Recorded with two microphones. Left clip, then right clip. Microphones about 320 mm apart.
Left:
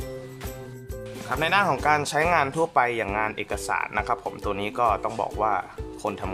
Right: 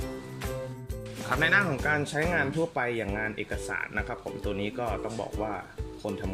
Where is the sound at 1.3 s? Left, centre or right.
Centre.